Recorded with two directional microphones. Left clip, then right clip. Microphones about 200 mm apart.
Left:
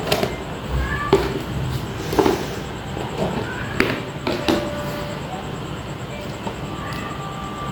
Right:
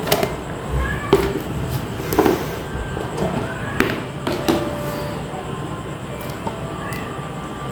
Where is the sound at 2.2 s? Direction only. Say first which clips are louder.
Right 1 dB; 10° right (ahead or behind).